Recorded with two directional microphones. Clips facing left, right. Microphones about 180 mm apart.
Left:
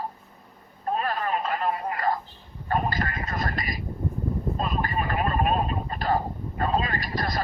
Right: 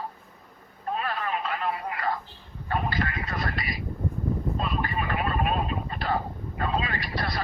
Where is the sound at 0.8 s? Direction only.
40° left (ahead or behind).